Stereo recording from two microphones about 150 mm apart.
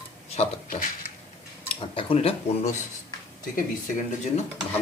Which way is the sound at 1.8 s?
40° left (ahead or behind).